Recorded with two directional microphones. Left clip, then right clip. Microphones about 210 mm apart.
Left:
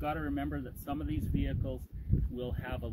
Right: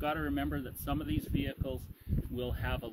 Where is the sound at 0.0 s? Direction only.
10° left (ahead or behind).